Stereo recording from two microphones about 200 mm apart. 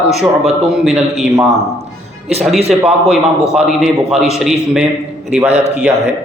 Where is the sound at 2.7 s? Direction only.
Centre (ahead or behind).